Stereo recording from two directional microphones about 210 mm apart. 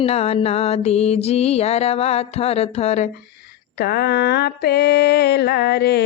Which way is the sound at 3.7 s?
45° left (ahead or behind).